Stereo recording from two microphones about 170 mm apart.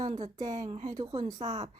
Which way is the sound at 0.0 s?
40° right (ahead or behind).